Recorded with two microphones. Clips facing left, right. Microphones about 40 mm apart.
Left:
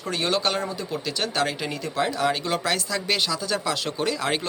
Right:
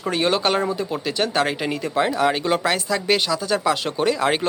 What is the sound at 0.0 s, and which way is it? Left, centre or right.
Speech, centre.